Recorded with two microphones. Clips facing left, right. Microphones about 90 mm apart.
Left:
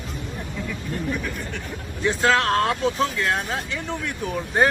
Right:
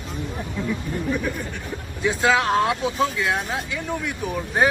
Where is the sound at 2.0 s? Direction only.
5° right (ahead or behind).